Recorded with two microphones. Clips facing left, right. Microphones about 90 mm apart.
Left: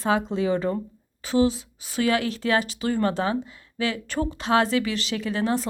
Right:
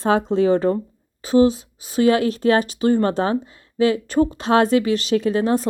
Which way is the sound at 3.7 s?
25° right (ahead or behind).